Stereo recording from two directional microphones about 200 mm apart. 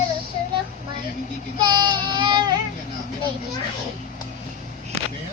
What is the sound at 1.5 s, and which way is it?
Baby cry, 20° right (ahead or behind).